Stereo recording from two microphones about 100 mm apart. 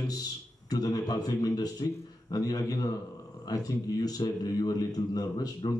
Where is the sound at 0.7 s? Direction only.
35° left (ahead or behind).